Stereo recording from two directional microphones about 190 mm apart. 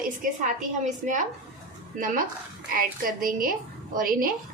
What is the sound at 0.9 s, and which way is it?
Speech, 40° right (ahead or behind).